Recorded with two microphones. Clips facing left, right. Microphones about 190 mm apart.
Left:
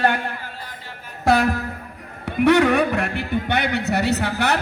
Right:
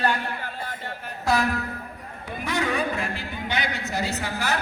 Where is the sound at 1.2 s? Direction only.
65° left (ahead or behind).